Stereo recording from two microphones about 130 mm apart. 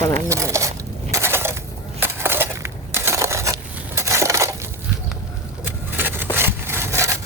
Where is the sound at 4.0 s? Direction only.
20° right (ahead or behind).